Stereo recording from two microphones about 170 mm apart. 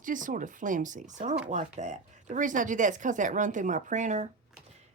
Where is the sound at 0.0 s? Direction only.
50° right (ahead or behind).